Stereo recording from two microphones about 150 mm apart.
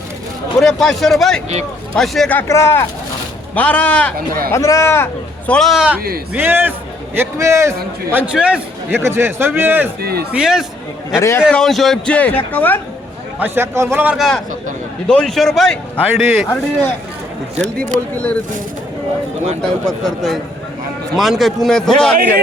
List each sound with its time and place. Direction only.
0.6 s a man's voice: centre (ahead or behind)
2.5 s a man's voice: 20° left (ahead or behind)
4.5 s speech: 20° left (ahead or behind)
5.5 s a man's voice: centre (ahead or behind); by 7.8 s 20° right (ahead or behind)
8.1 s a man's voice: 5° right (ahead or behind)
10.0 s speech: 90° right
10.3 s a man's voice: 5° right (ahead or behind)
11.1 s speech: 20° left (ahead or behind)
11.4 s a man's voice: centre (ahead or behind)
13.4 s a man's voice: 15° right (ahead or behind)
14.2 s a man's voice: centre (ahead or behind)
18.1 s a man's voice: 10° left (ahead or behind)
19.6 s a man's voice: centre (ahead or behind)